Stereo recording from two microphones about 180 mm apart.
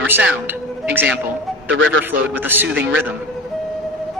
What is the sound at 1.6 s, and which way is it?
Speech, 90° right.